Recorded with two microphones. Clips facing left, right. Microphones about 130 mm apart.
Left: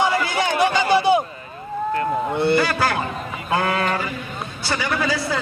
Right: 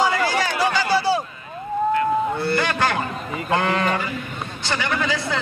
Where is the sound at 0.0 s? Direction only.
20° left (ahead or behind).